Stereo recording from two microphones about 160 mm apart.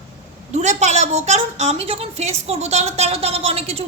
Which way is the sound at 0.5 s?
45° right (ahead or behind).